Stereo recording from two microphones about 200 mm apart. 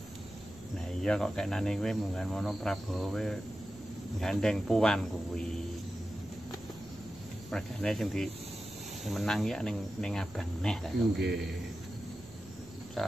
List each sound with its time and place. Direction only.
1.0 s speech: 5° left (ahead or behind)
7.5 s speech: centre (ahead or behind)
11.1 s a man's voice: 55° right (ahead or behind)